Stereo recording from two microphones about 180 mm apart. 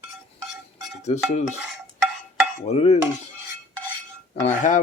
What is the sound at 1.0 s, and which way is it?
Stir, 40° left (ahead or behind).